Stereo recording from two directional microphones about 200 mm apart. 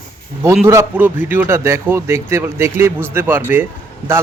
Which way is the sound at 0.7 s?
10° right (ahead or behind).